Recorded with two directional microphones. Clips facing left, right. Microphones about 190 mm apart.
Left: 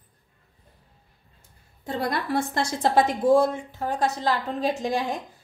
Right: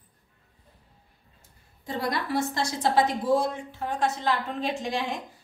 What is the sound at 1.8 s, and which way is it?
A woman's voice, 55° left (ahead or behind).